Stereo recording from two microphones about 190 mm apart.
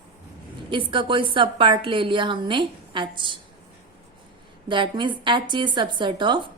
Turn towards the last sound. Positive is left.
turn(degrees=-25)  # may be behind; listen again after turning